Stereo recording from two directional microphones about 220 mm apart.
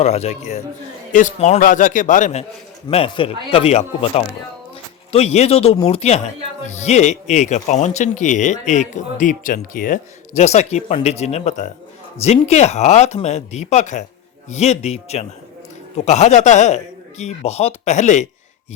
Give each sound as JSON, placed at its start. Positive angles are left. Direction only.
{"t": 0.0, "sound": "speech", "side_deg": 30}
{"t": 2.9, "sound": "speech", "side_deg": 25}